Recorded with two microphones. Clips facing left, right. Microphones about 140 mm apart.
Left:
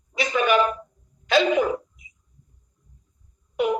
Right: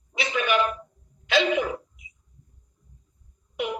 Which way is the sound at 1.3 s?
40° left (ahead or behind).